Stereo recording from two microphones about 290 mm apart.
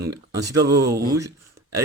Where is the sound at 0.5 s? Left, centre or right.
Centre.